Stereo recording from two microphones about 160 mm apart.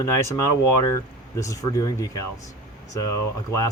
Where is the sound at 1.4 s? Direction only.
20° left (ahead or behind).